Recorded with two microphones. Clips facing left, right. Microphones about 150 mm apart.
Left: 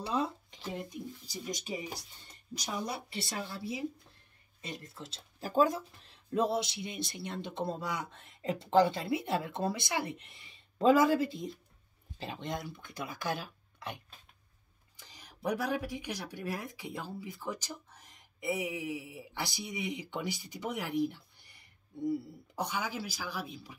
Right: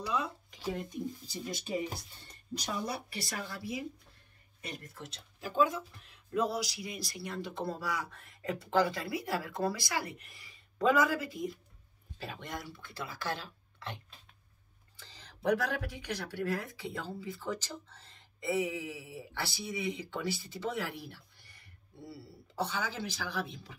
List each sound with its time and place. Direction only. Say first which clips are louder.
0.0 s speech: left 2 dB; 30° left (ahead or behind)
1.3 s speech: even; 15° left (ahead or behind)
2.9 s speech: even; 25° left (ahead or behind)